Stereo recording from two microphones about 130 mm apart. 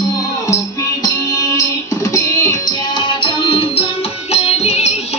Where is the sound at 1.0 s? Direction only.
25° left (ahead or behind).